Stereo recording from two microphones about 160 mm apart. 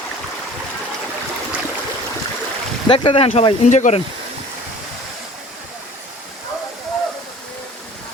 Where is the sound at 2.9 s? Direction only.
35° left (ahead or behind).